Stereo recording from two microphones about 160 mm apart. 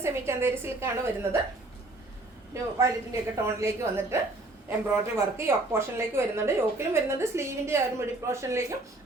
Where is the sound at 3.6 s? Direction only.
15° right (ahead or behind).